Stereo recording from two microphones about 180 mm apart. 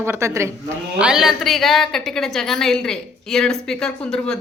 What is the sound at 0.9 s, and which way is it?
A woman's voice, 5° right (ahead or behind).